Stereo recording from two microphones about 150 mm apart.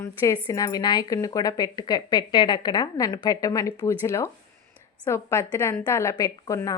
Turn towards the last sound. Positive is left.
turn(degrees=20)  # may be behind; listen again after turning